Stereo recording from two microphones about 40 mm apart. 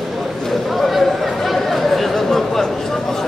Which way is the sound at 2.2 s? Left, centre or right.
Centre.